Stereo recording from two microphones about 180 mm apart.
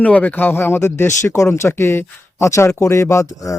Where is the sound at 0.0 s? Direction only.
10° left (ahead or behind).